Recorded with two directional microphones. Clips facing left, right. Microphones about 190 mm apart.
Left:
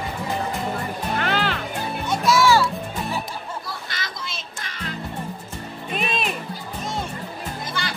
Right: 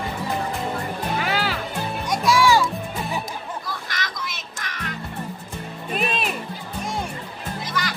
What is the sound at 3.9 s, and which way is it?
Music, 30° left (ahead or behind).